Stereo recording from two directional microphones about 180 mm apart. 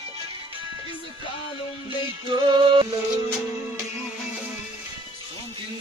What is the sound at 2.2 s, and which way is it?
Music, 25° right (ahead or behind).